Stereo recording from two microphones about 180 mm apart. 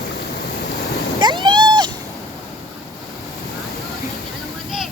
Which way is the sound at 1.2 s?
25° right (ahead or behind).